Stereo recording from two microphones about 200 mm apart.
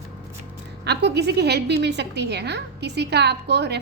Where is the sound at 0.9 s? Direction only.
55° right (ahead or behind).